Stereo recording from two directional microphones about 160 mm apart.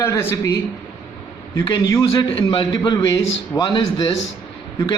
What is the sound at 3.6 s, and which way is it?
Speech, 35° left (ahead or behind).